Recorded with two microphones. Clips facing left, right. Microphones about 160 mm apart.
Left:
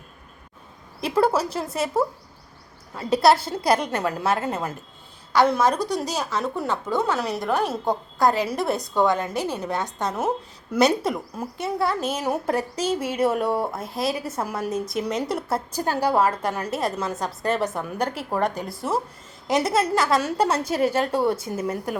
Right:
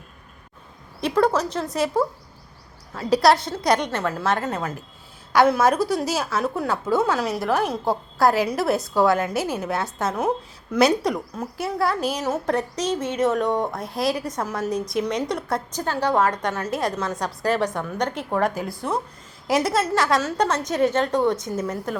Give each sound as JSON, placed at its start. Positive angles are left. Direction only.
{"t": 1.0, "sound": "a woman's voice", "side_deg": 5}
{"t": 3.9, "sound": "a woman's voice", "side_deg": 15}
{"t": 5.3, "sound": "a woman's voice", "side_deg": -10}
{"t": 12.2, "sound": "a woman's voice", "side_deg": 10}